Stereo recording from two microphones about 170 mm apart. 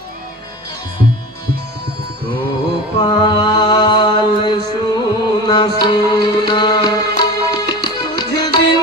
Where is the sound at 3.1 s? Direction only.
25° left (ahead or behind).